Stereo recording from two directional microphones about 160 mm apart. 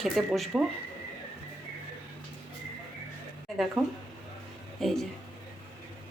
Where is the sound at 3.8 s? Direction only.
Centre (ahead or behind).